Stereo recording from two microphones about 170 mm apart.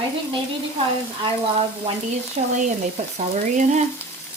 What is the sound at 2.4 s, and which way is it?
Speech, 40° right (ahead or behind).